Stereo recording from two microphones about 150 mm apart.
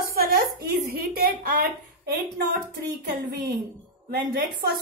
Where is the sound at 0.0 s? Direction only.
80° right.